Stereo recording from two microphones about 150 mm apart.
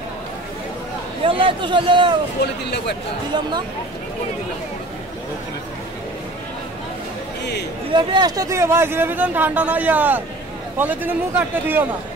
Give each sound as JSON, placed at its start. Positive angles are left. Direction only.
{"t": 1.2, "sound": "a man's voice", "side_deg": -35}
{"t": 7.9, "sound": "speech", "side_deg": -30}